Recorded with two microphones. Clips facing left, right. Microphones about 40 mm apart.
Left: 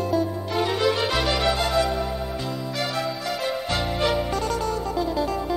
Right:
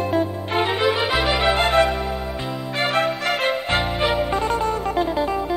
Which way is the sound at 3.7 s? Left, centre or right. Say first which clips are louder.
Even; right.